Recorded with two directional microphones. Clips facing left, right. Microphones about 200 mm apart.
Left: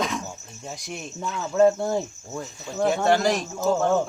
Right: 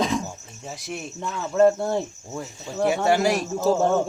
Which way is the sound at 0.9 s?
Centre (ahead or behind).